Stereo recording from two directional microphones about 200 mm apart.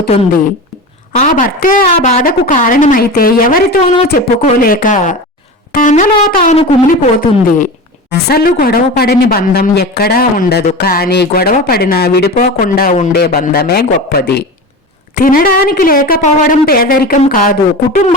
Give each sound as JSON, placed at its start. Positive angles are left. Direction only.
{"t": 1.1, "sound": "speech", "side_deg": 40}
{"t": 5.7, "sound": "wind instrument", "side_deg": 40}
{"t": 7.2, "sound": "speech", "side_deg": 45}